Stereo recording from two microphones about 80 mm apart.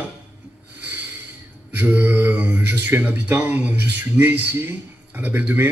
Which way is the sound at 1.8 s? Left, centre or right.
Right.